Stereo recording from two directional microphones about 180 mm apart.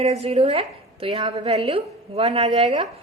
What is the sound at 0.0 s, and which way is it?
A woman's voice, 35° right (ahead or behind).